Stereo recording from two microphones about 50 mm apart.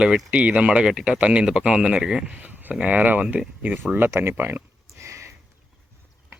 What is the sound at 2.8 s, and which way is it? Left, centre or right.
Speech, right.